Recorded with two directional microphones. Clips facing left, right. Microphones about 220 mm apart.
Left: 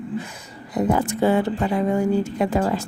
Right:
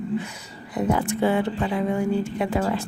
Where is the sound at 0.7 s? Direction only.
40° left (ahead or behind).